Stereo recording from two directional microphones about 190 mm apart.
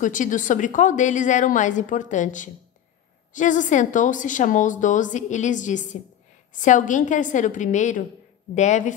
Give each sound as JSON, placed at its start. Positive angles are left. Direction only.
{"t": 0.0, "sound": "a woman's voice", "side_deg": 40}